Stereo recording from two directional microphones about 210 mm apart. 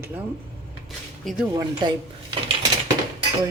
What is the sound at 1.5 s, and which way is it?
Speech, 20° right (ahead or behind).